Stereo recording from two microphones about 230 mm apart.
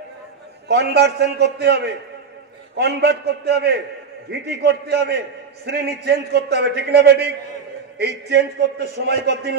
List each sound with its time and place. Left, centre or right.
0.7 s a man's voice: right
8.3 s a man's voice: right